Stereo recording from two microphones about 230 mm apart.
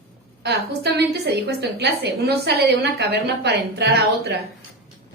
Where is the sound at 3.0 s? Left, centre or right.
Right.